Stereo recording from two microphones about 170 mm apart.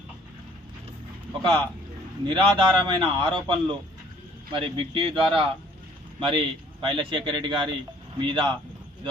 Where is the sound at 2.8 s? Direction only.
25° right (ahead or behind).